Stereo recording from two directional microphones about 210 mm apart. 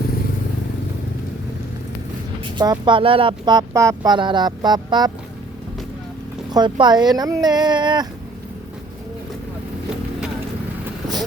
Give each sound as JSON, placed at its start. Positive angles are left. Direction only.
{"t": 2.4, "sound": "speech", "side_deg": -20}
{"t": 6.5, "sound": "speech", "side_deg": -20}